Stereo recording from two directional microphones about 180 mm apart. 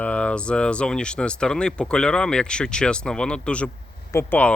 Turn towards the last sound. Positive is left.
turn(degrees=10)  # may be behind; listen again after turning